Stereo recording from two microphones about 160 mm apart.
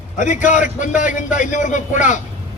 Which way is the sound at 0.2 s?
50° left (ahead or behind).